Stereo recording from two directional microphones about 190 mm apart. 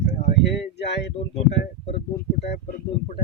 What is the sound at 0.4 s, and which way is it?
Speech, 65° left (ahead or behind).